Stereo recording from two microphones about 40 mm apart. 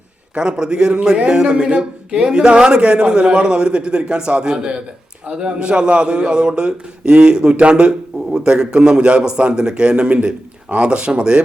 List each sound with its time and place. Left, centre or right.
0.3 s a man's voice: right